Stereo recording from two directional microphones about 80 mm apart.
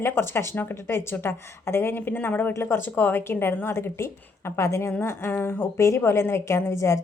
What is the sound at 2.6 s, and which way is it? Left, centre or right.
Speech, left.